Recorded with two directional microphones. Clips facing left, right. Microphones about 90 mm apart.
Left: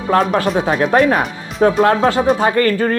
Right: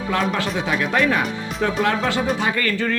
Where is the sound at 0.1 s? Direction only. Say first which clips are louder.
Left 8 dB; 40° left (ahead or behind).